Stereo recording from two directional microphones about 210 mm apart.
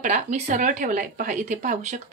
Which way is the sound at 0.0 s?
35° right (ahead or behind).